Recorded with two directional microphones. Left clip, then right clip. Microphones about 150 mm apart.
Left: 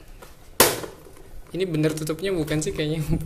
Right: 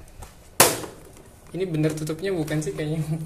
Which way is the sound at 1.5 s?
15° left (ahead or behind).